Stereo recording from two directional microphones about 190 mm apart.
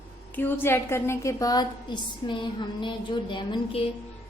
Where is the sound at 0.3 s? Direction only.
10° left (ahead or behind).